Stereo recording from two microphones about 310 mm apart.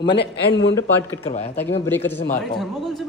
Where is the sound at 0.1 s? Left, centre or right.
Left.